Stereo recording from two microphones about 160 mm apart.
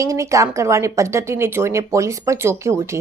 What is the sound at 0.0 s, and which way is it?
A woman's voice, 20° right (ahead or behind).